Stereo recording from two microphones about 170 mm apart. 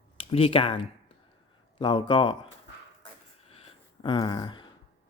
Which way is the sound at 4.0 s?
25° left (ahead or behind).